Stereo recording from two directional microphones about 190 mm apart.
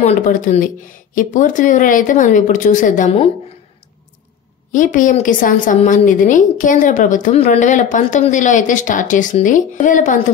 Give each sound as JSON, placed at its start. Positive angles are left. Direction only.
{"t": 0.0, "sound": "a woman's voice", "side_deg": 40}
{"t": 4.7, "sound": "a woman's voice", "side_deg": 45}